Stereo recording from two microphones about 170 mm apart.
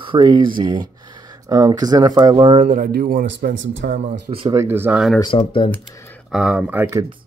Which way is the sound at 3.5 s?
90° right.